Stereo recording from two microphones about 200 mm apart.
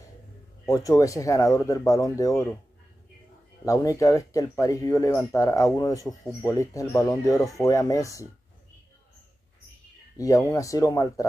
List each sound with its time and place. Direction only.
0.7 s speech: 15° left (ahead or behind)
3.6 s speech: 15° left (ahead or behind)
10.1 s speech: 15° left (ahead or behind)